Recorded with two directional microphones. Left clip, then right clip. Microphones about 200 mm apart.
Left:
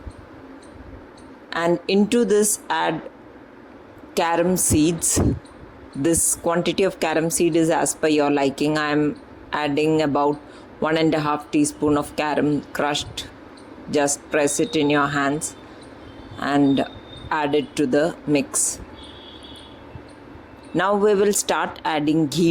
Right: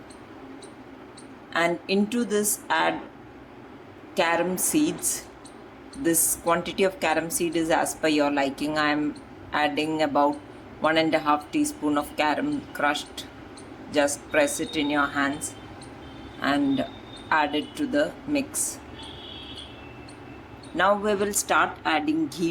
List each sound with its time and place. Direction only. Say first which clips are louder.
1.5 s speech: left 3 dB; 45° left (ahead or behind)
4.1 s speech: left 4 dB; 40° left (ahead or behind)
6.5 s speech: left 3 dB; 35° left (ahead or behind)
16.4 s speech: left 5 dB; 40° left (ahead or behind)
20.7 s speech: left 4 dB; 35° left (ahead or behind)